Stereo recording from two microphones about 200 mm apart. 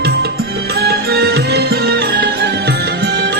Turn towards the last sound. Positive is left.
turn(degrees=-55)  # may be behind; listen again after turning